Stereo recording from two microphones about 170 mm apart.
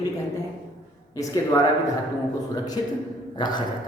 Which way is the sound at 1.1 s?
20° left (ahead or behind).